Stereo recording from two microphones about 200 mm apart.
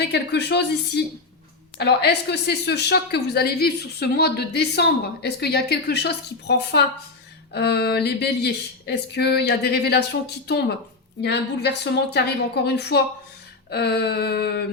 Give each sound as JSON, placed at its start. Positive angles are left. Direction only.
{"t": 0.1, "sound": "speech", "side_deg": 55}